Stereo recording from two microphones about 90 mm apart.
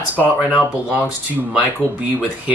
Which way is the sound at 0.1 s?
20° right (ahead or behind).